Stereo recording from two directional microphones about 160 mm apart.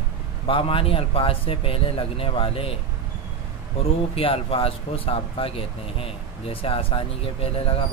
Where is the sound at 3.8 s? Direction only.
35° left (ahead or behind).